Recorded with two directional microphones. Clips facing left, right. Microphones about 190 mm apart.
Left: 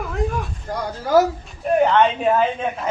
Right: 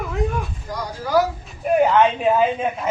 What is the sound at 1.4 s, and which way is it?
A man's voice, 5° right (ahead or behind).